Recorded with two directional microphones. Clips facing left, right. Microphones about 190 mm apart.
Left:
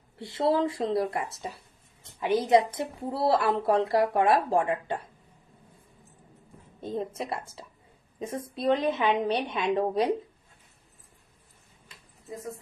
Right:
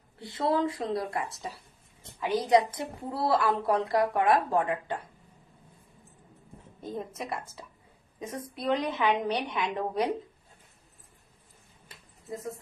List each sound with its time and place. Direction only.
0.2 s a woman's voice: 25° left (ahead or behind)
6.8 s a woman's voice: 30° left (ahead or behind)